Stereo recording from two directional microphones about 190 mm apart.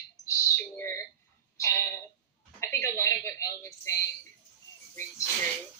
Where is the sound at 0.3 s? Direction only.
15° left (ahead or behind).